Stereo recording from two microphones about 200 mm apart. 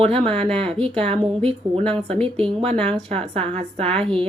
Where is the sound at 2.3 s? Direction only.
30° right (ahead or behind).